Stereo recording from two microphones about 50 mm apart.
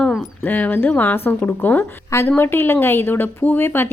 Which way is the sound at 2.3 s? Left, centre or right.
Left.